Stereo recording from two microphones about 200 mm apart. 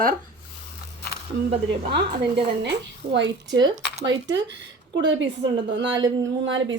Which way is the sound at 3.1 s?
60° right (ahead or behind).